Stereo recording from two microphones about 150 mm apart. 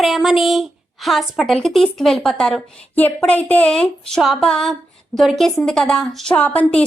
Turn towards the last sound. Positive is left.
turn(degrees=10)  # may be behind; listen again after turning